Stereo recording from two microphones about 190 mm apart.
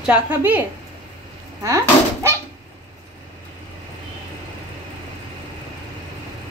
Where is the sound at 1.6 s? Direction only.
15° right (ahead or behind).